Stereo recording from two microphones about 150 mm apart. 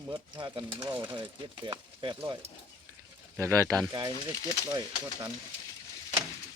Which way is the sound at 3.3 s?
20° right (ahead or behind).